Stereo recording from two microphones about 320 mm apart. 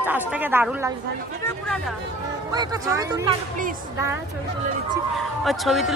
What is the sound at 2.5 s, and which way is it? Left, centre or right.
Speech, centre.